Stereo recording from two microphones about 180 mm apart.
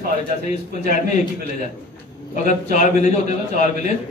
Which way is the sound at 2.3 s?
40° left (ahead or behind).